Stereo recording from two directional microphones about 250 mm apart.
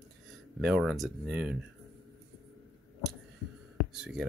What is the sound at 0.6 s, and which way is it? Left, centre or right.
Speech, centre.